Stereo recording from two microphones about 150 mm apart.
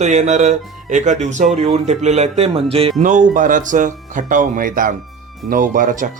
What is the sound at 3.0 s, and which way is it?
Speech, 60° right (ahead or behind).